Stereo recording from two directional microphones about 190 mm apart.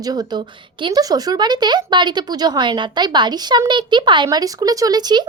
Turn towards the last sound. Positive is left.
turn(degrees=-20)  # may be behind; listen again after turning